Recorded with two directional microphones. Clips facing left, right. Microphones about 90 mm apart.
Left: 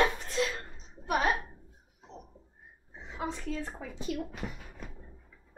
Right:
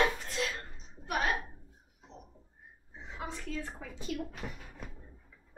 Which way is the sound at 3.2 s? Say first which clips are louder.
Left 4 dB; 20° left (ahead or behind).